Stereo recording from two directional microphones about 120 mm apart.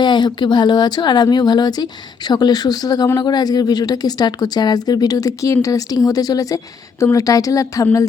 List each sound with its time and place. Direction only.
0.0 s speech: 40° left (ahead or behind)